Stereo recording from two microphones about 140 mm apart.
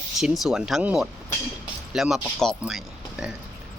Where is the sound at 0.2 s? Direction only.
Centre (ahead or behind).